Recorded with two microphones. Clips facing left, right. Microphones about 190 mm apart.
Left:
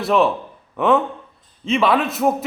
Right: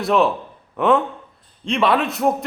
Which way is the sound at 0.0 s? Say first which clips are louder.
Even; centre (ahead or behind).